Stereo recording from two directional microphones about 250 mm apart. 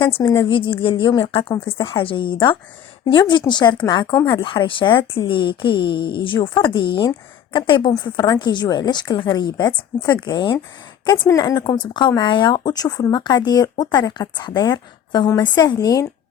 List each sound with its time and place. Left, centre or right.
0.0 s speech: centre
1.5 s speech: centre
1.8 s speech: left